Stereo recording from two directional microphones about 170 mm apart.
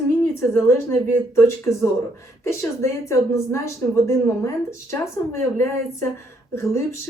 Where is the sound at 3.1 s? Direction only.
15° left (ahead or behind).